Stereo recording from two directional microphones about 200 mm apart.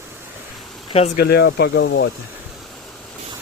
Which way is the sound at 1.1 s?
55° left (ahead or behind).